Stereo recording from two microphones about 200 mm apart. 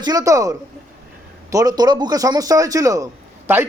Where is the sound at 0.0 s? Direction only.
20° right (ahead or behind).